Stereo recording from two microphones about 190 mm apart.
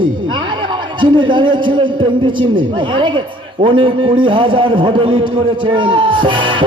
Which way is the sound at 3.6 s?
30° right (ahead or behind).